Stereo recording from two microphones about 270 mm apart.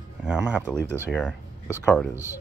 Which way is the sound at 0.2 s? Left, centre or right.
Centre.